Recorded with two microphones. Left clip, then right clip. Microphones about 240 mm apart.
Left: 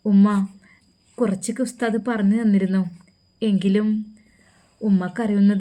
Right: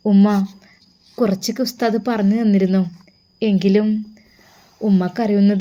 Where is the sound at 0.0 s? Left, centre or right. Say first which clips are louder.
Right 3 dB; centre.